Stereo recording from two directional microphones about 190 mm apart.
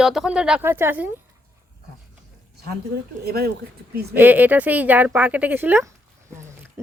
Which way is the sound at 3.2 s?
55° right (ahead or behind).